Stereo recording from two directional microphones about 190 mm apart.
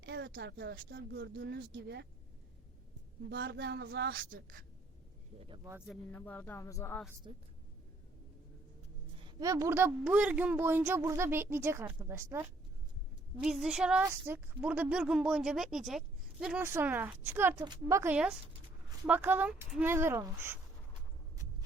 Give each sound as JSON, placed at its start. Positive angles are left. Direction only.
{"t": 0.0, "sound": "speech", "side_deg": -65}
{"t": 3.2, "sound": "speech", "side_deg": -70}
{"t": 5.6, "sound": "speech", "side_deg": -10}
{"t": 6.1, "sound": "speech", "side_deg": 10}
{"t": 9.4, "sound": "speech", "side_deg": -15}
{"t": 13.4, "sound": "a woman's voice", "side_deg": -5}